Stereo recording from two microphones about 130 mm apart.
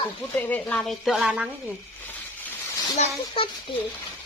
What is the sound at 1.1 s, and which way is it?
Speech, 5° right (ahead or behind).